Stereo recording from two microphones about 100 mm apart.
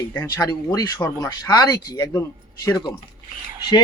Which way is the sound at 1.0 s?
35° left (ahead or behind).